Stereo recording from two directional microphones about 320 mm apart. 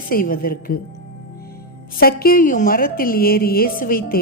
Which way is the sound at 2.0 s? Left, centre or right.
Left.